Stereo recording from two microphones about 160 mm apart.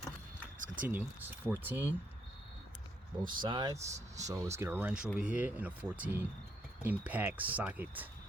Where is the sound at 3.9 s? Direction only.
45° right (ahead or behind).